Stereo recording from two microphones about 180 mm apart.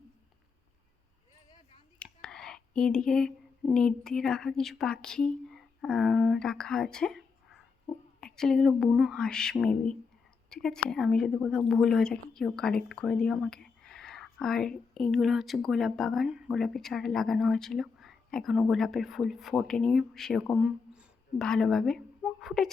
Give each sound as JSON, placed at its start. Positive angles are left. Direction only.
{"t": 2.2, "sound": "a woman's voice", "side_deg": 5}